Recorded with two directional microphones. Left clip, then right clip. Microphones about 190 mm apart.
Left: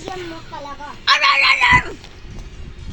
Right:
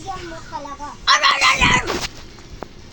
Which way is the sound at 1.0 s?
20° left (ahead or behind).